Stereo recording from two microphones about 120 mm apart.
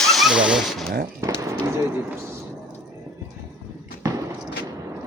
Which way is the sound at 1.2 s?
25° right (ahead or behind).